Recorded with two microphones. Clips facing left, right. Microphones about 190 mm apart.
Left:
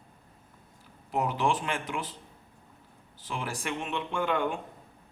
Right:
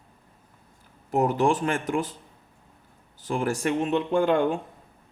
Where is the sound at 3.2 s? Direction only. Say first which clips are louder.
Right 10 dB; 45° right (ahead or behind).